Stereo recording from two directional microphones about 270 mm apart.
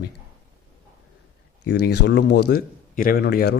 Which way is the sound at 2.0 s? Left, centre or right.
Left.